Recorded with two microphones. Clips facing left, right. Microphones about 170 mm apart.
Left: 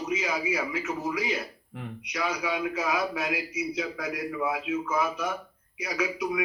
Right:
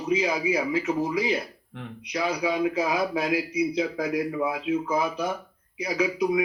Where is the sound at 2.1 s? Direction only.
30° right (ahead or behind).